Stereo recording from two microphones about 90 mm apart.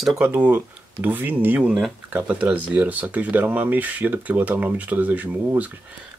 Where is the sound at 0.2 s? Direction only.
20° right (ahead or behind).